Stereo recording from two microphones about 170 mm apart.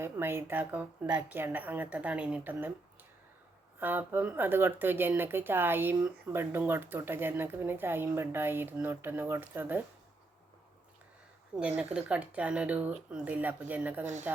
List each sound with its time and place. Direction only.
0.0 s a woman's voice: 15° right (ahead or behind)
11.8 s a woman's voice: 5° right (ahead or behind)